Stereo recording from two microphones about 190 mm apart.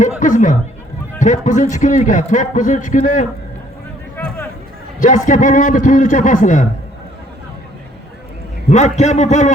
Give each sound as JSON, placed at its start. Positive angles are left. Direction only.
{"t": 0.2, "sound": "a man's voice", "side_deg": 40}
{"t": 4.9, "sound": "a man's voice", "side_deg": 40}
{"t": 8.7, "sound": "a man's voice", "side_deg": 40}